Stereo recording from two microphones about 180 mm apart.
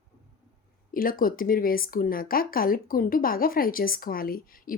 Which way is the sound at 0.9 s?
50° left (ahead or behind).